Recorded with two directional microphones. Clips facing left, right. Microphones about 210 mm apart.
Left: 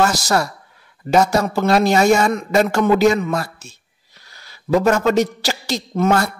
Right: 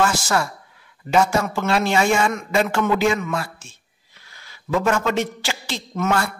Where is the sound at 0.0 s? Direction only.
40° left (ahead or behind).